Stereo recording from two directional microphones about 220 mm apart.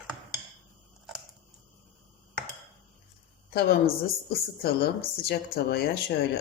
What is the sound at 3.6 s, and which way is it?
Speech, 45° left (ahead or behind).